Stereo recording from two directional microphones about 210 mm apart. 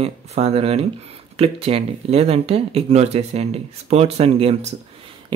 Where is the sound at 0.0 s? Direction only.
30° right (ahead or behind).